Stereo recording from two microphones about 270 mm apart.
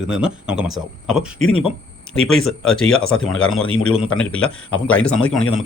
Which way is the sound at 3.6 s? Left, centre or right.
Left.